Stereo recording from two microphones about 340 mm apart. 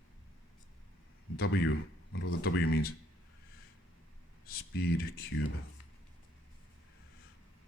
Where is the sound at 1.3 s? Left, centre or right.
Left.